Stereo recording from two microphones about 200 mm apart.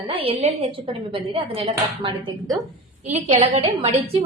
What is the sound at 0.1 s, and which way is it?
A woman's voice, 25° right (ahead or behind).